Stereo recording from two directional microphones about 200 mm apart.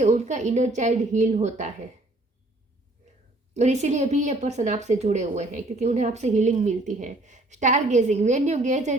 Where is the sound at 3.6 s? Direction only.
35° right (ahead or behind).